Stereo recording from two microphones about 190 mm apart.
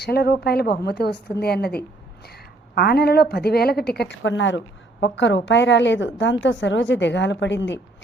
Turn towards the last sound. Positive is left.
turn(degrees=70)  # may be behind; listen again after turning